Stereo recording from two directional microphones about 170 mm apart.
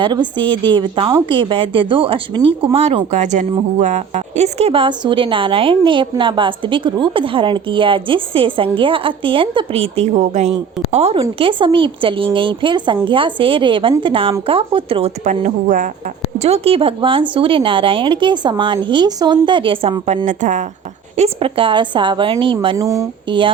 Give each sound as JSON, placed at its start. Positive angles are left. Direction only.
{"t": 0.0, "sound": "speech", "side_deg": -30}
{"t": 16.4, "sound": "speech", "side_deg": -35}
{"t": 20.2, "sound": "a woman's voice", "side_deg": -45}
{"t": 21.2, "sound": "speech", "side_deg": -30}
{"t": 22.8, "sound": "speech", "side_deg": -20}